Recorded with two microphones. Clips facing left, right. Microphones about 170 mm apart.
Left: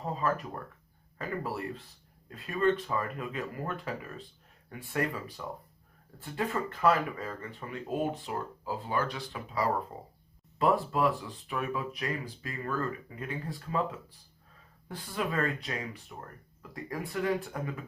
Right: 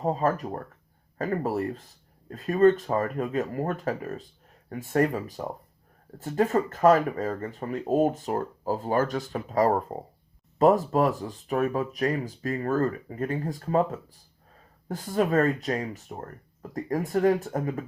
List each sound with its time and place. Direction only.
0.0 s speech: 45° right (ahead or behind)